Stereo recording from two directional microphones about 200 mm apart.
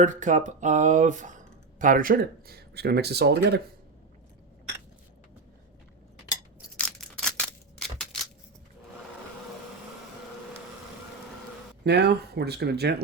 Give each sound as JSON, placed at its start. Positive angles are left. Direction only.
{"t": 0.0, "sound": "speech", "side_deg": -40}
{"t": 6.7, "sound": "scissors", "side_deg": 5}
{"t": 11.9, "sound": "speech", "side_deg": -55}